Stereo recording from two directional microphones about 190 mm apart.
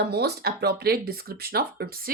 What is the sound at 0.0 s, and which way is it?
Speech, 55° right (ahead or behind).